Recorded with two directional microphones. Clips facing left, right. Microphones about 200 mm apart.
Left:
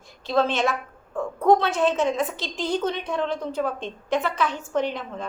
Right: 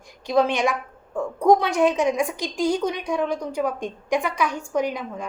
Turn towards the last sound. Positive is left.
turn(degrees=-10)  # may be behind; listen again after turning